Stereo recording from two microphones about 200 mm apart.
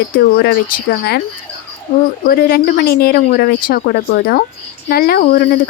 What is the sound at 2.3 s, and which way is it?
A woman's voice, 50° left (ahead or behind).